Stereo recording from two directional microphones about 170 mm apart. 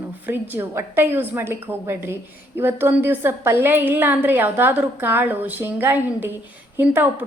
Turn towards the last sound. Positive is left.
turn(degrees=-10)  # may be behind; listen again after turning